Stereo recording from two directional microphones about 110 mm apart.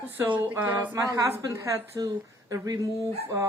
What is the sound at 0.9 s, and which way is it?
A woman's voice, 30° right (ahead or behind).